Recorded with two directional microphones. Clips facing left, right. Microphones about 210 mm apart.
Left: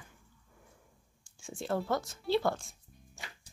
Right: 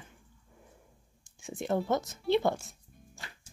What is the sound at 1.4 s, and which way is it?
Speech, 20° right (ahead or behind).